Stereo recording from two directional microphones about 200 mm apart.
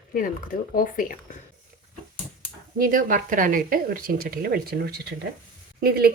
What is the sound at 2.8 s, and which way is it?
Speech, 45° right (ahead or behind).